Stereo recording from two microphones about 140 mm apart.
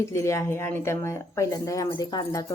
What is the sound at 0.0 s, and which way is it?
Speech, 20° left (ahead or behind).